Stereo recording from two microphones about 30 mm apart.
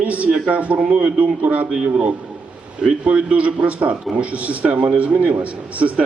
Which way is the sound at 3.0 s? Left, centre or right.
Right.